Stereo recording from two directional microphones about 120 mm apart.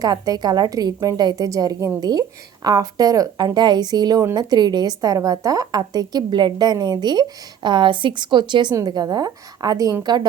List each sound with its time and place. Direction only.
0.0 s a woman's voice: 35° right (ahead or behind)